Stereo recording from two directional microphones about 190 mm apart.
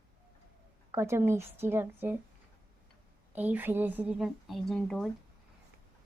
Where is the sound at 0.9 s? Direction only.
15° right (ahead or behind).